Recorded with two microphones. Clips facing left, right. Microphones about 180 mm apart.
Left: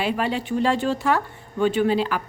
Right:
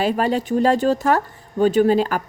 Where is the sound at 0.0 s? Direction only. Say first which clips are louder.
Right 5 dB; 40° right (ahead or behind).